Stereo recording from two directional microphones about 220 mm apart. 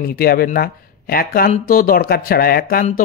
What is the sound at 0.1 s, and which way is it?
Speech, 45° left (ahead or behind).